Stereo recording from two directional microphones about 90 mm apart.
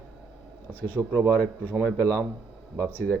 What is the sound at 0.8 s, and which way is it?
Speech, 20° right (ahead or behind).